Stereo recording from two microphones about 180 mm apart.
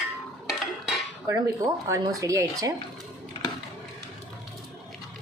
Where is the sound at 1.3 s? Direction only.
15° right (ahead or behind).